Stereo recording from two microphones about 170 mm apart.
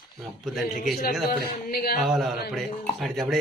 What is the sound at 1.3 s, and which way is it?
Speech, 65° left (ahead or behind).